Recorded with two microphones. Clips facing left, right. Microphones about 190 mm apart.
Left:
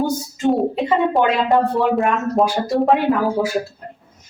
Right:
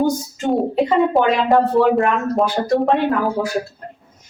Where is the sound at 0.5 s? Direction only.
Centre (ahead or behind).